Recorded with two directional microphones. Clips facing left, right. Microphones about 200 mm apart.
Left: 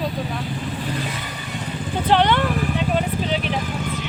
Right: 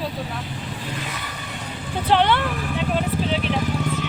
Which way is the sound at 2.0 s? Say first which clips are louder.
Left 1 dB; 5° right (ahead or behind).